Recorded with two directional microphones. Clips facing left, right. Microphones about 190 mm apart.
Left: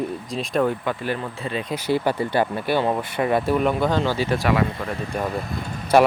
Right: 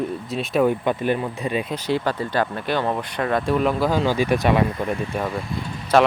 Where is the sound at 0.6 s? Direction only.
20° right (ahead or behind).